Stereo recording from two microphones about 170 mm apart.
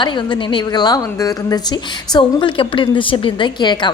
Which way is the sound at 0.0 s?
25° left (ahead or behind).